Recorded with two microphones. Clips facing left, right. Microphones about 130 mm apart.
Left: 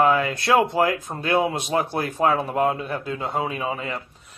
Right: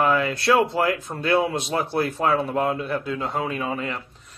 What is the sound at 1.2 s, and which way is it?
Speech, 15° left (ahead or behind).